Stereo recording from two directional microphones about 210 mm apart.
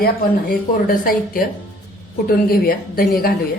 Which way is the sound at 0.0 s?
45° left (ahead or behind).